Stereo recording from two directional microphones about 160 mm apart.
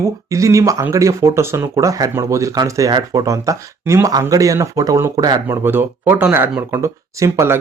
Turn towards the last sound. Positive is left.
turn(degrees=-20)  # may be behind; listen again after turning